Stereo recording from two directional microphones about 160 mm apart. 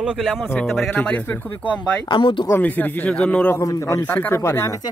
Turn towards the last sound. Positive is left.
turn(degrees=20)  # may be behind; listen again after turning